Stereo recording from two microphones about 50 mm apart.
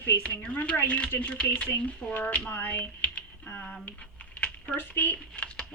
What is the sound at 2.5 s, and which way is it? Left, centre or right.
Speech, left.